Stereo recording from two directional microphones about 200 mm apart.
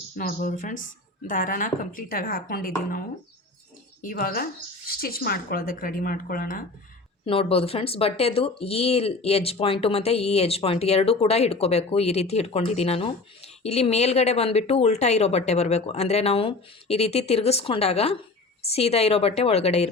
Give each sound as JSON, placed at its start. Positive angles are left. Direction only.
{"t": 0.2, "sound": "speech", "side_deg": 45}
{"t": 4.0, "sound": "speech", "side_deg": 45}
{"t": 7.3, "sound": "speech", "side_deg": 30}